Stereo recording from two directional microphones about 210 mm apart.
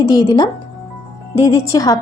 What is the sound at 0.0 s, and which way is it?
Speech, 20° left (ahead or behind).